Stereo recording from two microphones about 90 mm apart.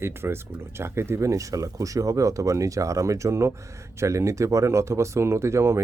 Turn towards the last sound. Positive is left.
turn(degrees=-30)  # may be behind; listen again after turning